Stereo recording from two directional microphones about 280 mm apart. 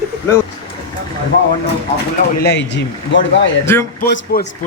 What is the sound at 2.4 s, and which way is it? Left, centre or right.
Speech, left.